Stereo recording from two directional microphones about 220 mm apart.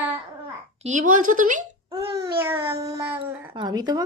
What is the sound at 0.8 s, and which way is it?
Speech, 30° right (ahead or behind).